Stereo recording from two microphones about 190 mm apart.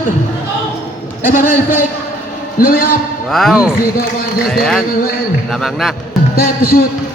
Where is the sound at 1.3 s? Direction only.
45° left (ahead or behind).